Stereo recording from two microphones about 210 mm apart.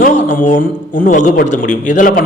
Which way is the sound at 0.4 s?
40° left (ahead or behind).